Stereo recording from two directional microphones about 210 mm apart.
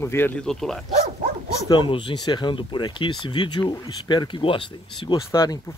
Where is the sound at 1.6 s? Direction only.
20° left (ahead or behind).